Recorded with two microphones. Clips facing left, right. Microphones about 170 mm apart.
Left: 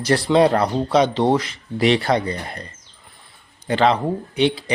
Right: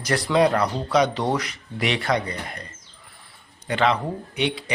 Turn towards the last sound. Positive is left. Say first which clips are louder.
# left 6 dB
turn(degrees=30)  # may be behind; listen again after turning